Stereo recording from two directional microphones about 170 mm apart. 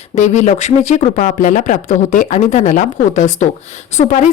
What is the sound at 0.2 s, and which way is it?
Speech, 45° left (ahead or behind).